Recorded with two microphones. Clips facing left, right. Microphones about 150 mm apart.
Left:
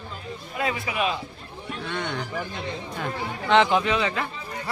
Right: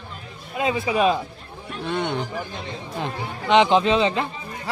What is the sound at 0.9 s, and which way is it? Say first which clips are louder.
Speech: right 8 dB; 35° right (ahead or behind).